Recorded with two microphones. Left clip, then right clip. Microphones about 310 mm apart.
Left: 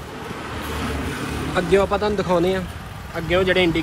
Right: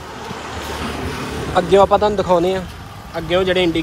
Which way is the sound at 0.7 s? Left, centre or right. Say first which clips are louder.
Right 2 dB; right.